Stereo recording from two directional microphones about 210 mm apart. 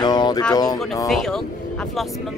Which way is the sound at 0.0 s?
20° left (ahead or behind).